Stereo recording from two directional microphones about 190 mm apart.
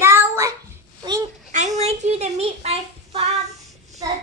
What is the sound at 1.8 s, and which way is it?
A child's voice, 35° right (ahead or behind).